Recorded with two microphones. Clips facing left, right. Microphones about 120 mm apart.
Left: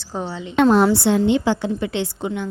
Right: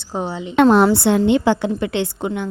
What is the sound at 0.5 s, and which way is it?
A woman's voice, 65° right (ahead or behind).